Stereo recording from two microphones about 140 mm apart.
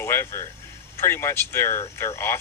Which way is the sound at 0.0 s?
20° left (ahead or behind).